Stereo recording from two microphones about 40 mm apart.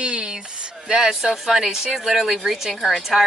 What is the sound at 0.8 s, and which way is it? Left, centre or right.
Speech, centre.